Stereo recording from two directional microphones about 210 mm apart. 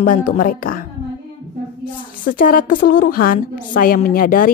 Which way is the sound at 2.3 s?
40° left (ahead or behind).